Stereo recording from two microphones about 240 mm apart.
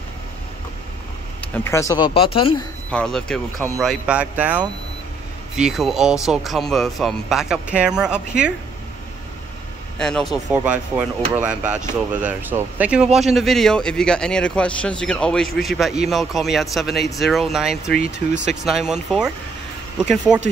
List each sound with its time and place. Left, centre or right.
1.5 s speech: centre
2.9 s a man's voice: centre
9.9 s a man's voice: centre